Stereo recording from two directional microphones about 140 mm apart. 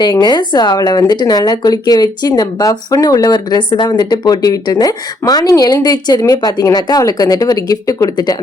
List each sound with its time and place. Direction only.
0.0 s speech: 30° left (ahead or behind)